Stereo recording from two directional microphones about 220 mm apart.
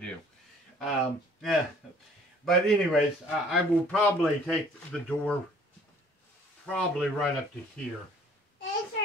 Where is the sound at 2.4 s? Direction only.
Centre (ahead or behind).